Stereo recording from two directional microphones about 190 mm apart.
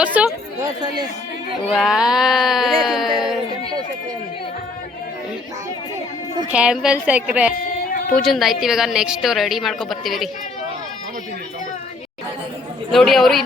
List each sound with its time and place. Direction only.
0.0 s a woman's voice: 5° right (ahead or behind)
0.6 s speech: 20° right (ahead or behind)
1.7 s a woman's voice: 5° right (ahead or behind)
6.5 s a woman's voice: 5° right (ahead or behind)
12.9 s a woman's voice: centre (ahead or behind)